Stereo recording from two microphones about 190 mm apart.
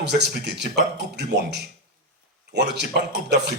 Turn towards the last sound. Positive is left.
turn(degrees=-65)  # may be behind; listen again after turning